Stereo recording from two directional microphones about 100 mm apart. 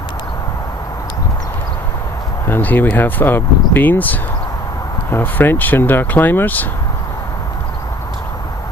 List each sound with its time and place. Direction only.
2.5 s speech: 20° left (ahead or behind)